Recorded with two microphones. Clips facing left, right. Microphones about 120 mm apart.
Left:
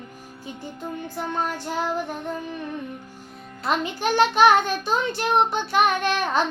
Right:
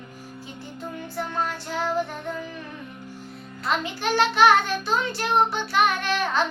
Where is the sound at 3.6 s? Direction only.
15° left (ahead or behind).